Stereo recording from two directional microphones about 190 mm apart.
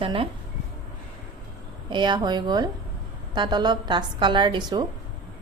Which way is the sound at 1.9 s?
25° right (ahead or behind).